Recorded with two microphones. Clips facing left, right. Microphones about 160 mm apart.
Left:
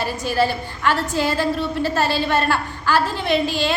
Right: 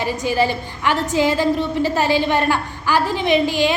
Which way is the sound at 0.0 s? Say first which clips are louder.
Right 1 dB; 15° right (ahead or behind).